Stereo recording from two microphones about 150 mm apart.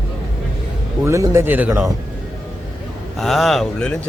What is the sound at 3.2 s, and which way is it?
Speech, centre (ahead or behind).